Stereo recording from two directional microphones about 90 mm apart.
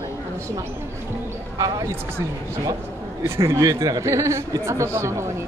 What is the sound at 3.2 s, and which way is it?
Speech, 30° right (ahead or behind).